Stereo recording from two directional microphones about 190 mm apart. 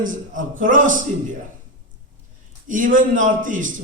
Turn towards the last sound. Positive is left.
turn(degrees=-45)  # may be behind; listen again after turning